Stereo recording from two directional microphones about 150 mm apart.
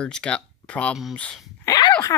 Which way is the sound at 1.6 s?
30° left (ahead or behind).